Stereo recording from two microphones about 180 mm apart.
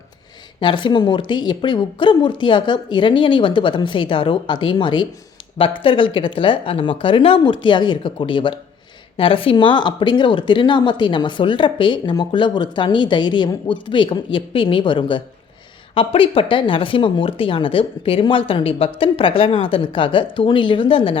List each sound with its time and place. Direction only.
0.6 s a woman's voice: 25° left (ahead or behind)